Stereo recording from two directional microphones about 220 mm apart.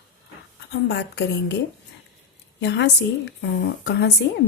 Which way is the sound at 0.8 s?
50° left (ahead or behind).